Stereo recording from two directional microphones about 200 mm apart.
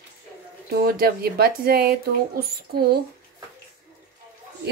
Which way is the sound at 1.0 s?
50° right (ahead or behind).